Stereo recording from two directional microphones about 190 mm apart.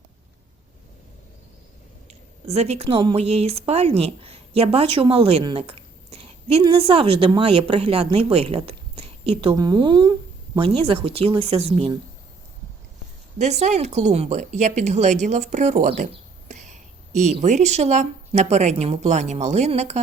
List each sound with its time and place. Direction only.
2.5 s speech: 35° right (ahead or behind)
4.9 s a sound: 30° right (ahead or behind)
6.6 s speech: 30° right (ahead or behind)
13.4 s speech: 35° right (ahead or behind)